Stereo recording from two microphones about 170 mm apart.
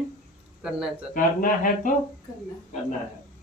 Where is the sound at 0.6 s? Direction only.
5° right (ahead or behind).